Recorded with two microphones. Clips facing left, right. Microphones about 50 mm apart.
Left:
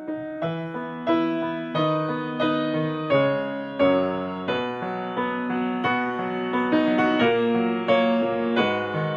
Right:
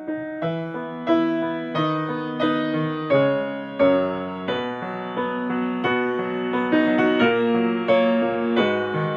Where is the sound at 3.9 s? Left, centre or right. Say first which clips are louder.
Right 1 dB; right.